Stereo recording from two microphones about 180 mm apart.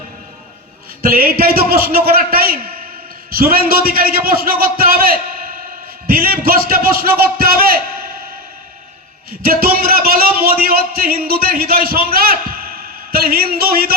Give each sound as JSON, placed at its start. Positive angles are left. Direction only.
{"t": 1.0, "sound": "a man's voice", "side_deg": -55}
{"t": 9.4, "sound": "a man's voice", "side_deg": -55}